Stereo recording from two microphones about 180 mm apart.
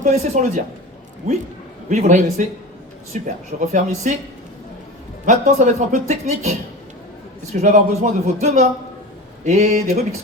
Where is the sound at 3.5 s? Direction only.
50° right (ahead or behind).